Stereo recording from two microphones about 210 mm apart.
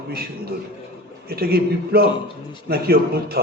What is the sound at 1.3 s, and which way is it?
A man's voice, 45° right (ahead or behind).